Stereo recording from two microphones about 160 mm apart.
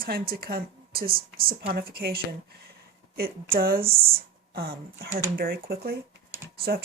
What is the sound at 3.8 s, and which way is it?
Speech, 35° right (ahead or behind).